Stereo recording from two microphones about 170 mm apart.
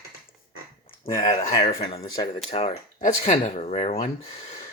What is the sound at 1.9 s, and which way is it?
Speech, 25° left (ahead or behind).